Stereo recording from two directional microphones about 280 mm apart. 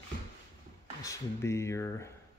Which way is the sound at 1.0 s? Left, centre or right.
Centre.